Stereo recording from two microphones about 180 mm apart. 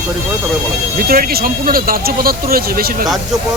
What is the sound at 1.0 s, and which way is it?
Speech, 55° right (ahead or behind).